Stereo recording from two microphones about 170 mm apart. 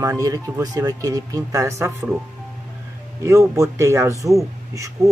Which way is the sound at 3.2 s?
20° right (ahead or behind).